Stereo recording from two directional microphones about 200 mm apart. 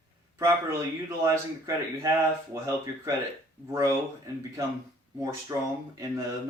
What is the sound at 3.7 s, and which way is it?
Speech, 15° right (ahead or behind).